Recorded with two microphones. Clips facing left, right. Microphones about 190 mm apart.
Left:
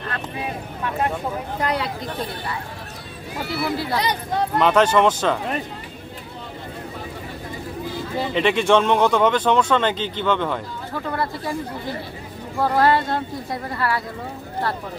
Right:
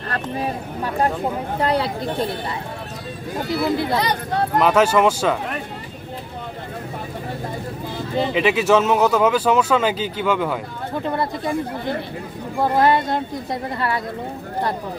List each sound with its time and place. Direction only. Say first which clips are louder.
0.1 s a woman's voice: right 6 dB; 40° right (ahead or behind)
3.4 s a woman's voice: right 4 dB; 20° right (ahead or behind)
4.6 s speech: right 1 dB; 5° right (ahead or behind)
8.4 s speech: even; 5° right (ahead or behind)
10.9 s a woman's voice: right 3 dB; 20° right (ahead or behind)
12.7 s a woman's voice: right 1 dB; 20° right (ahead or behind)